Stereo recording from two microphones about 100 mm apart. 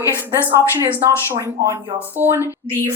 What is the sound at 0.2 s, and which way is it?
Speech, 25° right (ahead or behind).